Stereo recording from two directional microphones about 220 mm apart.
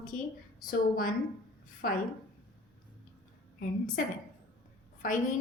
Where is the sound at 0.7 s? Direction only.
40° left (ahead or behind).